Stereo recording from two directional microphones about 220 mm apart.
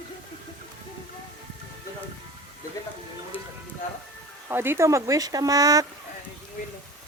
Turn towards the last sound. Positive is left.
turn(degrees=-15)  # may be behind; listen again after turning